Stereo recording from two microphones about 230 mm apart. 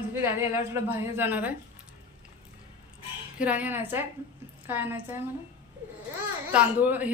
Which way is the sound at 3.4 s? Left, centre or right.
Centre.